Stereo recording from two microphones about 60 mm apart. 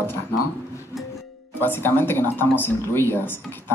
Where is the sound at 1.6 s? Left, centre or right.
Left.